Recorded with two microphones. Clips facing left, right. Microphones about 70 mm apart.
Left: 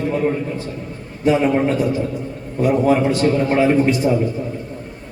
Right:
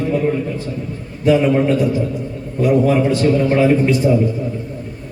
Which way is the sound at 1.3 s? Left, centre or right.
Left.